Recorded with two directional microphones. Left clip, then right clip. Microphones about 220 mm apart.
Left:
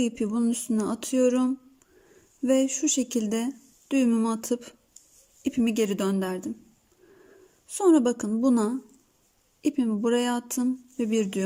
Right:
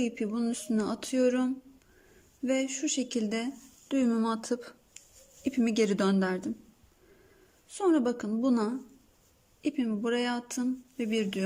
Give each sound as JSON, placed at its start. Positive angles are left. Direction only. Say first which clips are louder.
{"t": 0.0, "sound": "speech", "louder": "left 5 dB", "side_deg": 15}
{"t": 7.7, "sound": "speech", "louder": "left 6 dB", "side_deg": 15}